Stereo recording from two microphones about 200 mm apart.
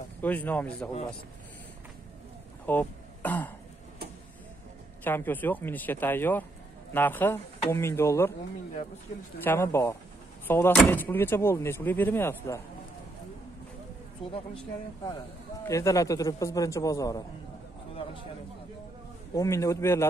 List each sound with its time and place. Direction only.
0.2 s speech: 10° left (ahead or behind)
2.6 s throat clearing: 10° left (ahead or behind)
5.0 s speech: 10° left (ahead or behind)
9.4 s speech: 10° left (ahead or behind)
15.6 s speech: 15° left (ahead or behind)
19.3 s speech: 15° left (ahead or behind)